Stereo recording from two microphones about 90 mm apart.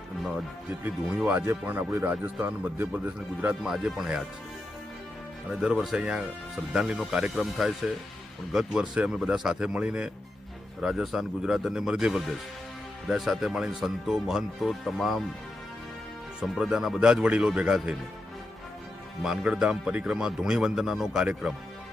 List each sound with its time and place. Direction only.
1.3 s speech: 25° right (ahead or behind)
3.6 s a man's voice: 5° right (ahead or behind)
5.5 s a man's voice: 5° right (ahead or behind)
16.4 s a man's voice: 5° right (ahead or behind)
19.2 s speech: 5° right (ahead or behind)